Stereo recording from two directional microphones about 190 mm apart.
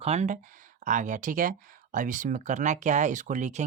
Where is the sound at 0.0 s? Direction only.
35° right (ahead or behind).